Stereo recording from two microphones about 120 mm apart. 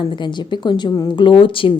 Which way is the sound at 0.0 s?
40° left (ahead or behind).